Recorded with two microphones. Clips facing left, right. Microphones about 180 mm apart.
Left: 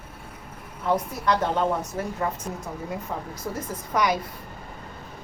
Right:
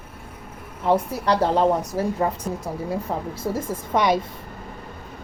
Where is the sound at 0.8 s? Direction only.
35° right (ahead or behind).